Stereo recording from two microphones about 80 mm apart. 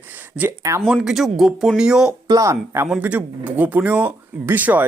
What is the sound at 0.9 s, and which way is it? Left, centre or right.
Speech, centre.